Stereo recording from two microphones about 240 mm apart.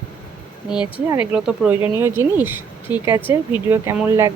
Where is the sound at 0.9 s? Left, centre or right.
Centre.